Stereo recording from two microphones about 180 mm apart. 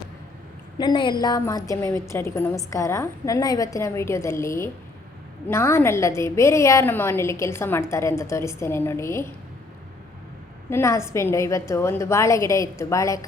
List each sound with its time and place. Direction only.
0.8 s a woman's voice: 25° left (ahead or behind)
10.7 s a woman's voice: 15° left (ahead or behind)